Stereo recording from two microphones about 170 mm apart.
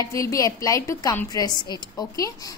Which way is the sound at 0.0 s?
20° left (ahead or behind).